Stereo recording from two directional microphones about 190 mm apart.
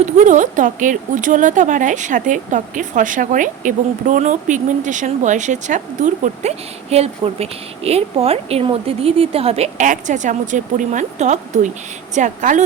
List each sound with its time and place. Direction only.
0.0 s speech: 40° right (ahead or behind)